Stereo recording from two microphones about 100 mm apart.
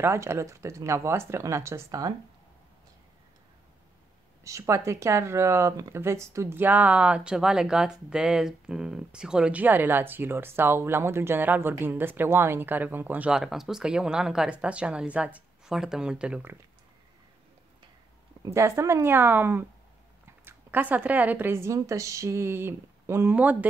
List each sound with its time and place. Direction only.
0.0 s speech: 25° right (ahead or behind)
4.5 s speech: 30° right (ahead or behind); by 16.4 s 10° right (ahead or behind)
18.4 s speech: 30° right (ahead or behind)